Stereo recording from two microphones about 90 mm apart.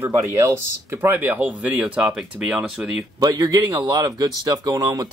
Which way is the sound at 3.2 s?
45° right (ahead or behind).